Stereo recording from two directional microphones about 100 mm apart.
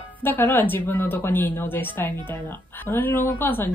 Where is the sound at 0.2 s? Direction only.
20° left (ahead or behind).